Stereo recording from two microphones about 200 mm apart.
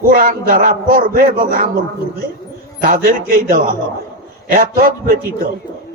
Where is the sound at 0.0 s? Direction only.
45° right (ahead or behind).